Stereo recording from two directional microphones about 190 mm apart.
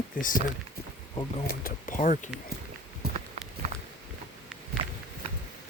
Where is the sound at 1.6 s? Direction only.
45° left (ahead or behind).